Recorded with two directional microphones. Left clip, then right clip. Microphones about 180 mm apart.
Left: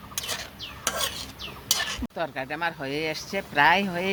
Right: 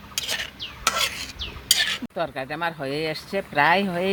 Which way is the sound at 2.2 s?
50° right (ahead or behind).